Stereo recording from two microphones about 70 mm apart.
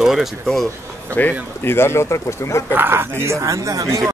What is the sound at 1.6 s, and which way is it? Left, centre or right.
Speech, left.